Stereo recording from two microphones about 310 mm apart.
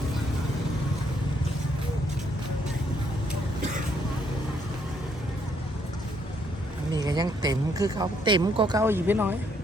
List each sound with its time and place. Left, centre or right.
6.9 s speech: centre